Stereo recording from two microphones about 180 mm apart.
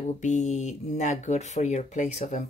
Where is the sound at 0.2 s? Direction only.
40° left (ahead or behind).